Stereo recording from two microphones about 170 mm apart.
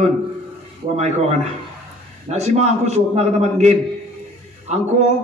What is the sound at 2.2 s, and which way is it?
A man's voice, 40° right (ahead or behind).